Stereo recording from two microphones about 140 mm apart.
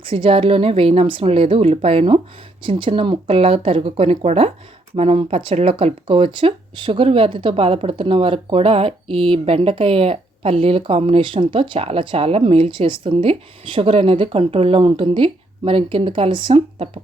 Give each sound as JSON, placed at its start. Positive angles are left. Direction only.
{"t": 0.0, "sound": "speech", "side_deg": -40}